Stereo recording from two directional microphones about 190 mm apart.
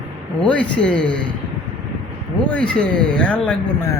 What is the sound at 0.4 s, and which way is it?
Speech, 5° left (ahead or behind).